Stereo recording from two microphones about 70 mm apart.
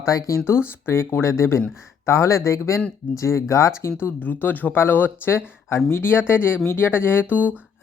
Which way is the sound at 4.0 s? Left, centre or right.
Left.